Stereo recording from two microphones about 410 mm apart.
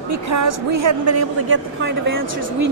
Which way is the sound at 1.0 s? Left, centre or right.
Right.